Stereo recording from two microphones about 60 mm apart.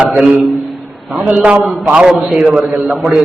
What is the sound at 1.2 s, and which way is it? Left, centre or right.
A man's voice, right.